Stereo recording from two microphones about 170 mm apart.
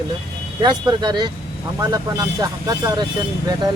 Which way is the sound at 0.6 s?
25° right (ahead or behind).